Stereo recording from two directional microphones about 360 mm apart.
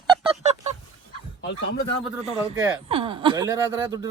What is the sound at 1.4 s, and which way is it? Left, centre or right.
Speech, left.